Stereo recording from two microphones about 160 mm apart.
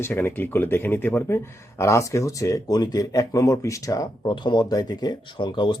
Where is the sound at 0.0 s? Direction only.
15° left (ahead or behind).